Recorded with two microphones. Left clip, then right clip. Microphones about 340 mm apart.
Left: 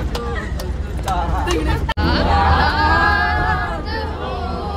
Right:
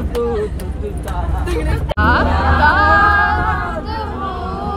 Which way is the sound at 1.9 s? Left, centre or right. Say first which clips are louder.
Right 4 dB; centre.